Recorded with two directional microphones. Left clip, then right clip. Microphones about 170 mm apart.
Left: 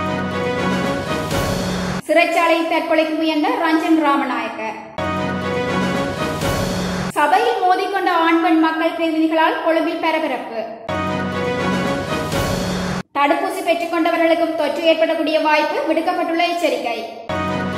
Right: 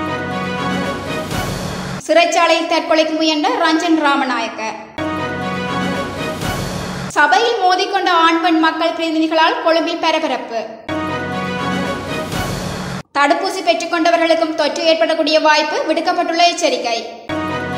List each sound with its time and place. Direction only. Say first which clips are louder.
2.0 s a woman's voice: right 3 dB; 20° right (ahead or behind)
7.2 s a woman's voice: right 3 dB; 15° right (ahead or behind)
9.3 s a woman's voice: right 5 dB; 15° right (ahead or behind)
13.2 s a woman's voice: right 3 dB; 20° right (ahead or behind)